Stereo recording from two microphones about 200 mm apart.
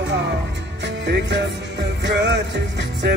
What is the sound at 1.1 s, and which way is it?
Music, 60° right (ahead or behind).